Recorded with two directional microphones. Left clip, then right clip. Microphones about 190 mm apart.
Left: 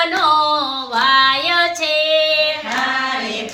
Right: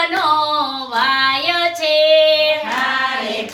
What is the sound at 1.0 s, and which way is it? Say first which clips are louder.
Child singing: left 2 dB; 25° left (ahead or behind).